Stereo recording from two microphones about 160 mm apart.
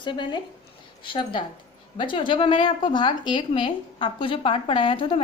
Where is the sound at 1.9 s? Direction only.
30° left (ahead or behind).